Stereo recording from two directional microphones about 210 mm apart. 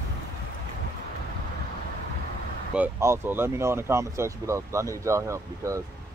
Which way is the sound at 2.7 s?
10° right (ahead or behind).